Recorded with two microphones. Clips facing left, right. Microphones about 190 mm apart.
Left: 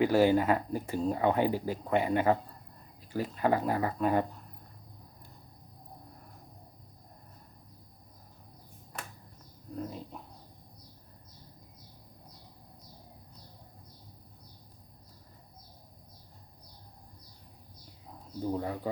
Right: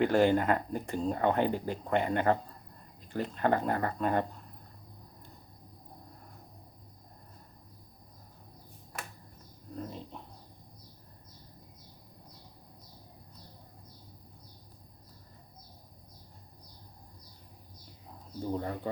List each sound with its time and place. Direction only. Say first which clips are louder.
0.0 s speech: left 1 dB; 5° left (ahead or behind)
9.7 s a sound: left 2 dB; 5° left (ahead or behind)
18.3 s speech: left 1 dB; 5° left (ahead or behind)